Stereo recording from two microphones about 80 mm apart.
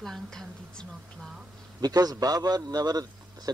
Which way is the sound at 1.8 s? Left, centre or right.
Right.